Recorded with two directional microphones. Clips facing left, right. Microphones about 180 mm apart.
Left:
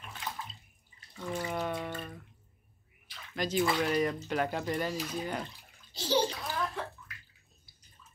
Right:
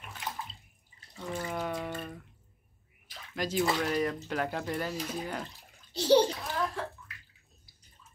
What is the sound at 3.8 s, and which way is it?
Speech, 5° left (ahead or behind).